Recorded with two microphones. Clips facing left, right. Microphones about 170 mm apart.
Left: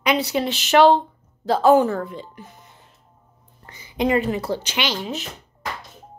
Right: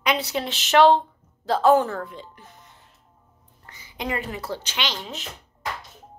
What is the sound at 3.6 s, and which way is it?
Speech, 20° left (ahead or behind).